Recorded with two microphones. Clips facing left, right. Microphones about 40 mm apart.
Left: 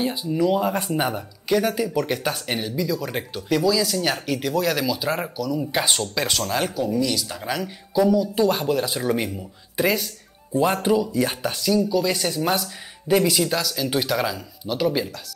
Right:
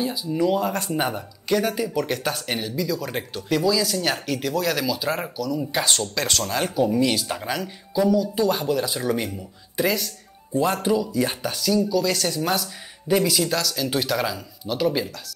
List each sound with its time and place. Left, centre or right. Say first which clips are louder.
0.0 s speech: left 1 dB; left
0.3 s speech: left 1 dB; centre
0.6 s speech: left 2 dB; centre
0.9 s speech: left 1 dB; centre
6.7 s speech: right 3 dB; centre
7.0 s speech: right 2 dB; right
7.4 s speech: left 1 dB; centre